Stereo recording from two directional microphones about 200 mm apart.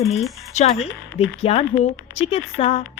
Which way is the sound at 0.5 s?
35° left (ahead or behind).